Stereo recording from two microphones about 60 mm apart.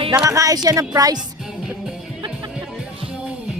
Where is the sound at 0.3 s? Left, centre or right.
Right.